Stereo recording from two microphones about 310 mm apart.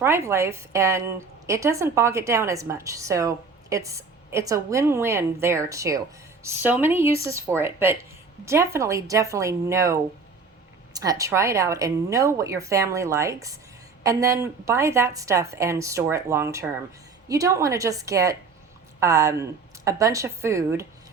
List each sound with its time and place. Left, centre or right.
0.0 s a woman's voice: centre